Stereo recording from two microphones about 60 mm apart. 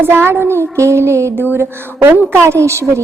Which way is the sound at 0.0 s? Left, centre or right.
Right.